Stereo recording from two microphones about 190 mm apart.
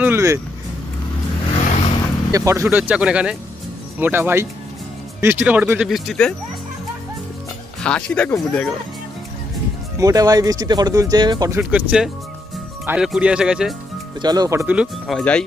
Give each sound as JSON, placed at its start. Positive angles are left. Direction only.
{"t": 0.0, "sound": "speech", "side_deg": -15}
{"t": 1.5, "sound": "vehicle", "side_deg": 35}
{"t": 2.3, "sound": "speech", "side_deg": -15}
{"t": 7.8, "sound": "speech", "side_deg": 5}
{"t": 9.9, "sound": "speech", "side_deg": -20}
{"t": 11.7, "sound": "speech", "side_deg": -5}
{"t": 14.2, "sound": "speech", "side_deg": -20}